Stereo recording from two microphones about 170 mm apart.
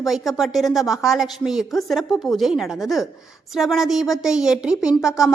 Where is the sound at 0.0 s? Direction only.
Centre (ahead or behind).